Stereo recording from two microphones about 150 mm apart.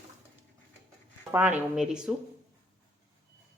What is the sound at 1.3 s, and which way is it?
Speech, 15° right (ahead or behind).